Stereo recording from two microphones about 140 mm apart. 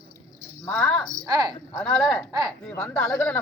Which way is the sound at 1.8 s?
5° left (ahead or behind).